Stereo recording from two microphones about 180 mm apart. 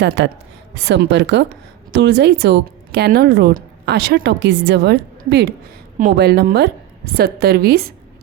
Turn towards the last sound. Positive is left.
turn(degrees=-60)  # may be behind; listen again after turning